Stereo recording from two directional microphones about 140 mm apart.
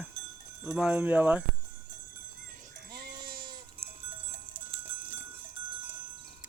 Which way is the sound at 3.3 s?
90° right.